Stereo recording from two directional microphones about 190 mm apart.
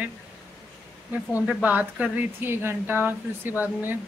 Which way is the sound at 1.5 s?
10° right (ahead or behind).